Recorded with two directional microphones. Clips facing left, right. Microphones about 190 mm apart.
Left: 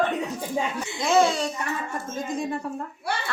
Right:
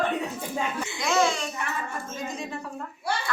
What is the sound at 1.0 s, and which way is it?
Speech, 30° left (ahead or behind).